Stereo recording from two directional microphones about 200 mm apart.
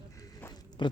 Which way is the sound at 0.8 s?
20° left (ahead or behind).